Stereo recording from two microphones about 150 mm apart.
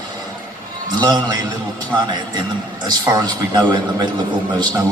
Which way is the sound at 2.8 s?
25° right (ahead or behind).